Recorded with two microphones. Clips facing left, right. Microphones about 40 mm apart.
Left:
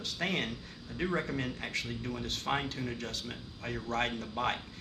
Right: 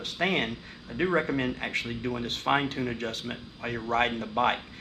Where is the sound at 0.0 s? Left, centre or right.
Right.